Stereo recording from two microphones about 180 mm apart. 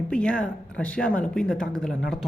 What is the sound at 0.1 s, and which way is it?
Speech, 5° left (ahead or behind).